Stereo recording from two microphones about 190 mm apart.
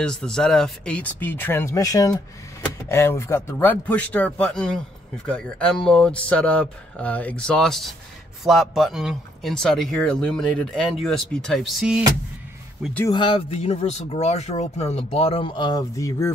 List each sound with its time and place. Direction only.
0.0 s speech: 5° left (ahead or behind)
13.1 s speech: 25° left (ahead or behind)